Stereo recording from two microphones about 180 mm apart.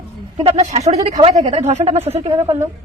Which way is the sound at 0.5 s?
40° right (ahead or behind).